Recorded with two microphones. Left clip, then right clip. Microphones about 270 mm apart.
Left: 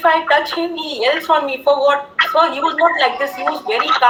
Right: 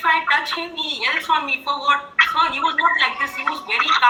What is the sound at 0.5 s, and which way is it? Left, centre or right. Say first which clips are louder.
A woman's voice: left 3 dB; left.